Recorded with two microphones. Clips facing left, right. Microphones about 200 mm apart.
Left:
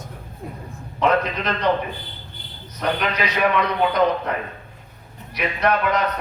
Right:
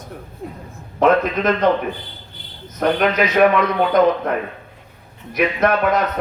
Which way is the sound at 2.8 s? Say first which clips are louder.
Right 6 dB; 50° right (ahead or behind).